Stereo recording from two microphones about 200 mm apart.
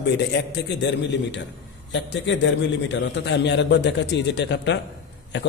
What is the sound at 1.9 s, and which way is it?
A man's voice, 65° left (ahead or behind).